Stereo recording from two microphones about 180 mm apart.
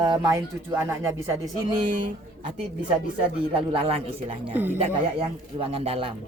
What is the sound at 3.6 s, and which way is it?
Speech, 30° right (ahead or behind).